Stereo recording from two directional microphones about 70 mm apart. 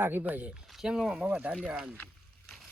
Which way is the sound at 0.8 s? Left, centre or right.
Centre.